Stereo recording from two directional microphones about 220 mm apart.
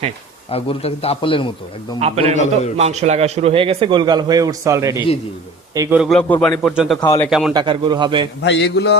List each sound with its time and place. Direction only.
0.5 s a man's voice: 25° left (ahead or behind)
2.0 s a man's voice: 30° right (ahead or behind)
6.0 s a man's voice: centre (ahead or behind)
7.5 s a man's voice: 20° right (ahead or behind)
8.4 s a sound: 50° left (ahead or behind)